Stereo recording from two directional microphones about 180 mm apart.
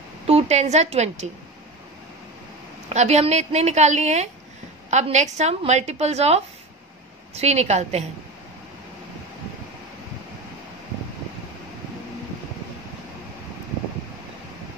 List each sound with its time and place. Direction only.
0.3 s a woman's voice: 35° right (ahead or behind)
2.9 s a woman's voice: 40° right (ahead or behind)